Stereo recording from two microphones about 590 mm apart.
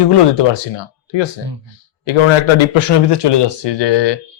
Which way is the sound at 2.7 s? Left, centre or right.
Left.